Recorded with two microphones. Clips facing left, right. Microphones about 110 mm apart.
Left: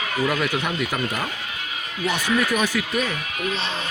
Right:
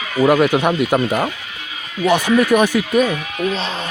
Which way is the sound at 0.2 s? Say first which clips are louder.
Right 11 dB; 65° right (ahead or behind).